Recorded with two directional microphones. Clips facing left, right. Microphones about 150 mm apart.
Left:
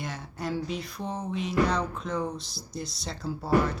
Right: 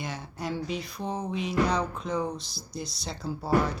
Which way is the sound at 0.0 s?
Centre (ahead or behind).